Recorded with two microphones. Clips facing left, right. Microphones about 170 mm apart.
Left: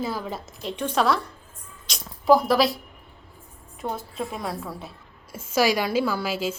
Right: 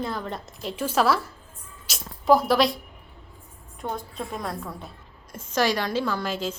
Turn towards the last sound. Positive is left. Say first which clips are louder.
# left 2 dB
turn(degrees=5)  # may be behind; listen again after turning